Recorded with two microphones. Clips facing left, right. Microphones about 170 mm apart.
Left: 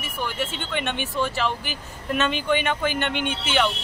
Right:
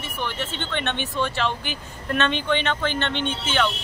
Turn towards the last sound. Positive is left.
turn(degrees=10)  # may be behind; listen again after turning